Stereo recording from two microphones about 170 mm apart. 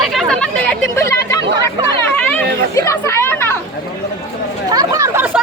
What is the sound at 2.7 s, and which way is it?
Speech, 15° left (ahead or behind).